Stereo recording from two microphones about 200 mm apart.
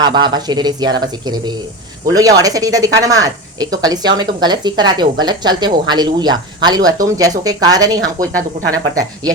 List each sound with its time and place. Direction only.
0.0 s speech: 20° right (ahead or behind)